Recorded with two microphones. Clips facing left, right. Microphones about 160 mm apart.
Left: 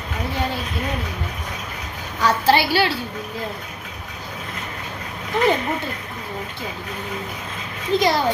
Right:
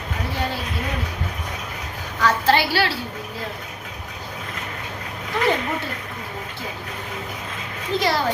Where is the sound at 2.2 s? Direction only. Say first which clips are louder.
Left 1 dB; 15° left (ahead or behind).